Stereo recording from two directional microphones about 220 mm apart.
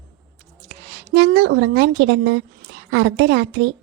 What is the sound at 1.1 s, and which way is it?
A woman's voice, 50° right (ahead or behind).